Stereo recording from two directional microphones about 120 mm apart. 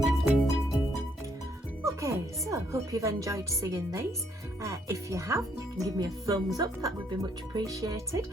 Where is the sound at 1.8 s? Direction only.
25° right (ahead or behind).